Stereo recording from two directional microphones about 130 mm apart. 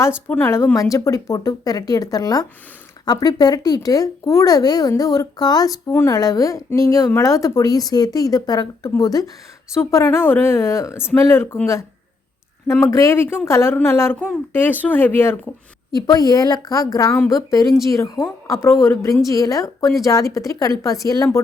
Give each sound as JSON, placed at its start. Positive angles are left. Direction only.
{"t": 0.3, "sound": "a woman's voice", "side_deg": 15}
{"t": 5.9, "sound": "speech", "side_deg": 20}
{"t": 6.1, "sound": "a woman's voice", "side_deg": 30}
{"t": 16.0, "sound": "a woman's voice", "side_deg": 30}